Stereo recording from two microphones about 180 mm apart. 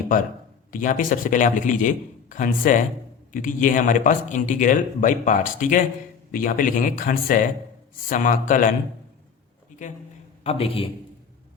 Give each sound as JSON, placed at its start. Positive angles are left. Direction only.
{"t": 0.7, "sound": "speech", "side_deg": 50}
{"t": 10.4, "sound": "a man's voice", "side_deg": 35}